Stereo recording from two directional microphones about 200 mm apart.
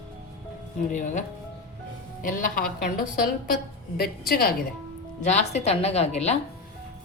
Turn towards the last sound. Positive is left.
turn(degrees=35)  # may be behind; listen again after turning